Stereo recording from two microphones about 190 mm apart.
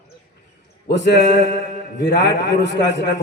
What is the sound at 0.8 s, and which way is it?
A man's voice, 70° left (ahead or behind).